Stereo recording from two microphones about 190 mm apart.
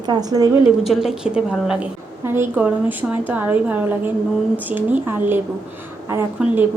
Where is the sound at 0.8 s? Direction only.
Centre (ahead or behind).